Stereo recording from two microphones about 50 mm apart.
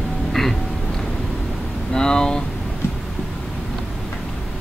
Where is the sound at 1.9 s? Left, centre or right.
Centre.